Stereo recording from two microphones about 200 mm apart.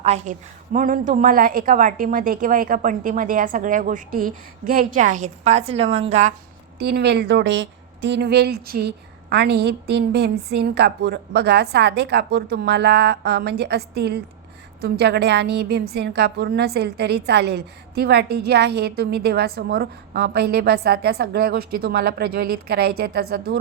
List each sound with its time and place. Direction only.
0.0 s a woman's voice: 35° right (ahead or behind)
6.7 s a woman's voice: 55° right (ahead or behind)